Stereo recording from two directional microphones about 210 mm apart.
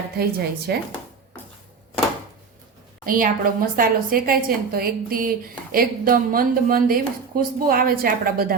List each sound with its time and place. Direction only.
0.2 s a woman's voice: 50° right (ahead or behind)
3.1 s a woman's voice: 40° right (ahead or behind)